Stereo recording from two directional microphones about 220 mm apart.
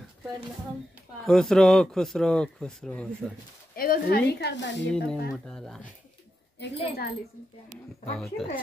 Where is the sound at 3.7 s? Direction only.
40° left (ahead or behind).